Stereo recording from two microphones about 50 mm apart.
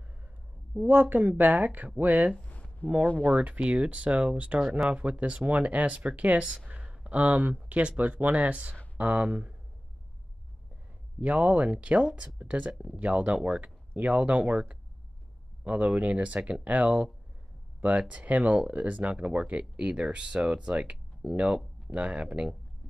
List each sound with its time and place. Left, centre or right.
0.8 s speech: right
2.4 s a sound: left
3.3 s speech: right
11.1 s speech: right